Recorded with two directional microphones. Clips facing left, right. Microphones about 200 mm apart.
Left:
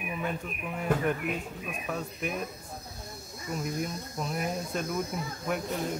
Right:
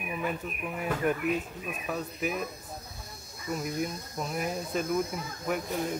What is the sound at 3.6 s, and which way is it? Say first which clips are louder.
Speech: left 1 dB; 5° right (ahead or behind).